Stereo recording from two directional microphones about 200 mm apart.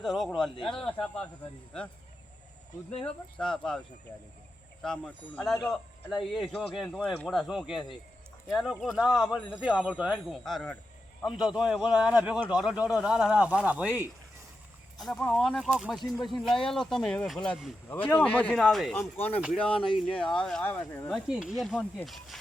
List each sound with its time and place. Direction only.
0.0 s speech: centre (ahead or behind)
3.0 s a man's voice: 5° left (ahead or behind)
21.1 s speech: 5° right (ahead or behind)